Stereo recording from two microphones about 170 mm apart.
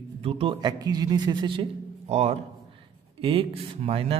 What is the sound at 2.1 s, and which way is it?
A man's voice, 40° right (ahead or behind).